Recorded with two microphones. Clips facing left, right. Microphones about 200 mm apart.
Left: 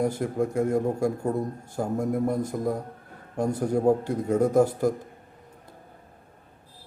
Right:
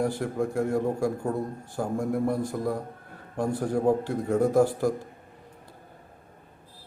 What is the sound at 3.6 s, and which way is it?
Speech, 10° left (ahead or behind).